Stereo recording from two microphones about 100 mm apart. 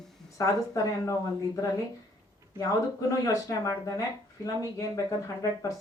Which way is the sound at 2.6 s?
35° left (ahead or behind).